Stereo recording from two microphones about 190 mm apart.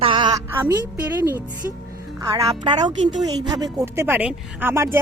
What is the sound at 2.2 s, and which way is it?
Speech, 25° right (ahead or behind).